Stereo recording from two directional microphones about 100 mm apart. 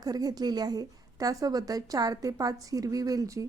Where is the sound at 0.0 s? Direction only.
40° right (ahead or behind).